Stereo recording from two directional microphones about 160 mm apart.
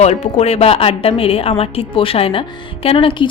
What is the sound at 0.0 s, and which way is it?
A woman's voice, 45° left (ahead or behind).